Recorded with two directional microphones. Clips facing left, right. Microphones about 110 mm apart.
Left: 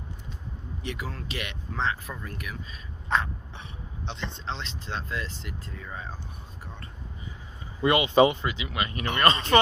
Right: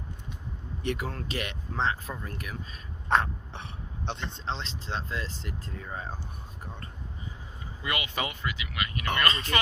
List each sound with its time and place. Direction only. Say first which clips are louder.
0.8 s speech: right 4 dB; 50° right (ahead or behind)
3.1 s a sound: right 2 dB; 60° right (ahead or behind)
4.5 s speech: right 2 dB; 30° right (ahead or behind)
7.8 s speech: left 13 dB; 25° left (ahead or behind)